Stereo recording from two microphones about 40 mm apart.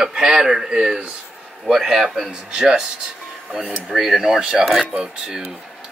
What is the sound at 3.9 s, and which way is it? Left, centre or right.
Speech, centre.